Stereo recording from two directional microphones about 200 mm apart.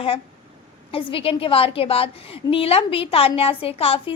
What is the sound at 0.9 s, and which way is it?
A woman's voice, 25° left (ahead or behind).